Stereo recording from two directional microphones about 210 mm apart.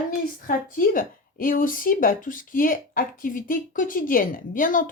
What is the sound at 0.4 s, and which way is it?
Speech, 40° left (ahead or behind).